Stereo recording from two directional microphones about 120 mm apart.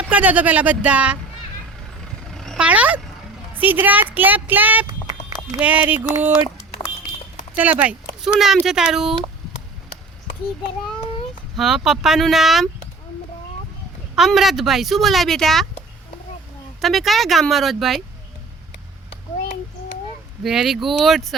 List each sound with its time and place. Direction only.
0.1 s speech: 15° right (ahead or behind)
2.3 s a sound: 5° left (ahead or behind)
2.6 s speech: 10° right (ahead or behind)
7.5 s speech: 15° right (ahead or behind)
11.5 s speech: centre (ahead or behind)
14.2 s speech: centre (ahead or behind)
16.8 s speech: centre (ahead or behind)
20.4 s speech: 5° right (ahead or behind)